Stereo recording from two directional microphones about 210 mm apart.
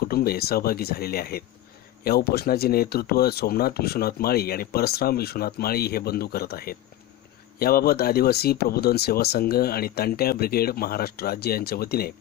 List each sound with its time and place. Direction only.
0.1 s speech: 45° left (ahead or behind)